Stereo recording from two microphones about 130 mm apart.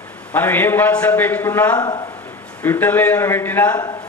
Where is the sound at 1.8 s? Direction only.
35° left (ahead or behind).